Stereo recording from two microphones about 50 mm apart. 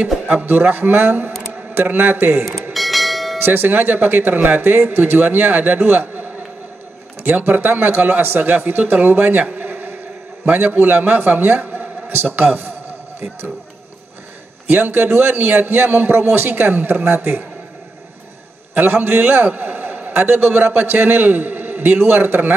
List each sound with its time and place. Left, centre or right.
0.5 s speech: right
2.7 s bell: centre
3.4 s speech: right
7.2 s speech: right
9.6 s insect: right
10.4 s speech: right
12.2 s a man's voice: right
14.7 s speech: right
18.8 s a man's voice: right
20.2 s a man's voice: right